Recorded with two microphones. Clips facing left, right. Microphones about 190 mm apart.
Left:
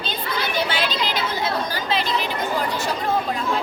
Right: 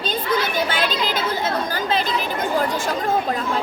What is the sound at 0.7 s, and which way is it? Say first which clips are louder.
Speech: right 2 dB; 50° right (ahead or behind).